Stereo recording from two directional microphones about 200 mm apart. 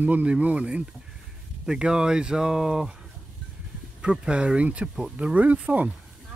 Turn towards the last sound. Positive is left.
turn(degrees=-5)  # may be behind; listen again after turning